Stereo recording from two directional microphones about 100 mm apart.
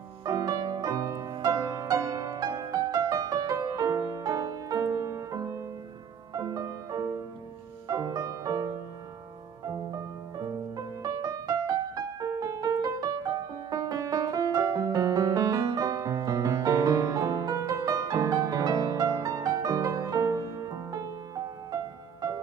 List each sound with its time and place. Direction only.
0.2 s music: 35° right (ahead or behind)
9.8 s music: 40° right (ahead or behind)